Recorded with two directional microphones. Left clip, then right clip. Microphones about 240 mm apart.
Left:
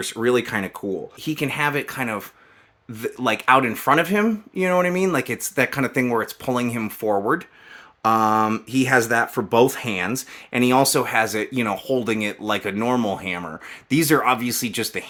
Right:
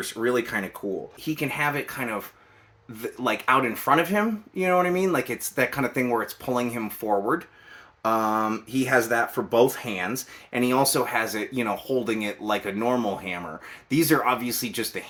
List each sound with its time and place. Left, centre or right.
0.0 s speech: left